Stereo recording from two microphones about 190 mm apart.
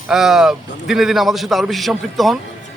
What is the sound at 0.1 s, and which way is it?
A man's voice, centre (ahead or behind).